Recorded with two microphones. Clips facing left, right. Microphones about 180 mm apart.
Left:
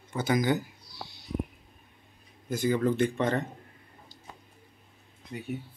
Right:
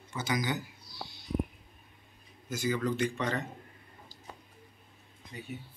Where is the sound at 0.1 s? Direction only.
50° left (ahead or behind).